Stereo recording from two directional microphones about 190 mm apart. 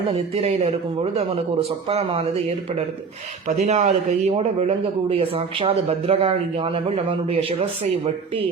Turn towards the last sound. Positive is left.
turn(degrees=-30)  # may be behind; listen again after turning